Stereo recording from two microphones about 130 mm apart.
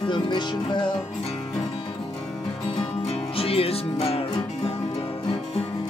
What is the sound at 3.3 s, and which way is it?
Music, 50° left (ahead or behind).